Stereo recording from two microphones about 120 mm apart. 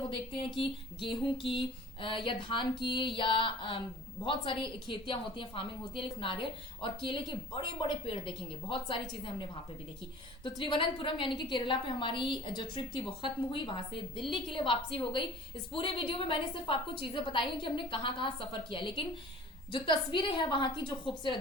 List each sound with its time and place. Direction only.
0.1 s a woman's voice: 45° left (ahead or behind)
10.6 s a woman's voice: 45° left (ahead or behind)